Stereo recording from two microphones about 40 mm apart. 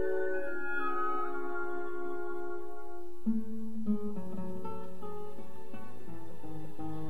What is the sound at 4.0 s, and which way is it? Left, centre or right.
Guitar, right.